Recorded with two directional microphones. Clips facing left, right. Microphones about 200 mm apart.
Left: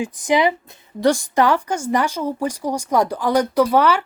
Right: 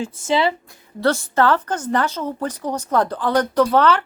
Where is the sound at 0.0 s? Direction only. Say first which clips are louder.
Left 2 dB; 15° left (ahead or behind).